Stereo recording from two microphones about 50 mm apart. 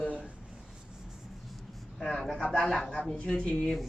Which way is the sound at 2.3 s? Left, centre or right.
Centre.